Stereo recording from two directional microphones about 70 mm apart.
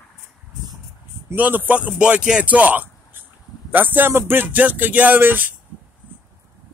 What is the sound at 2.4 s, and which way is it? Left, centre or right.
A man's voice, right.